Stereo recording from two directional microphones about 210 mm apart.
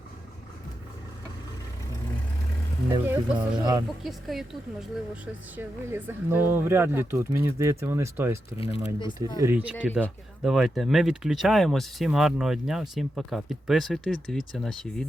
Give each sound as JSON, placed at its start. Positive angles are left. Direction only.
{"t": 2.9, "sound": "speech", "side_deg": -20}
{"t": 4.0, "sound": "a woman's voice", "side_deg": 0}
{"t": 8.5, "sound": "speech", "side_deg": 25}
{"t": 9.4, "sound": "speech", "side_deg": -10}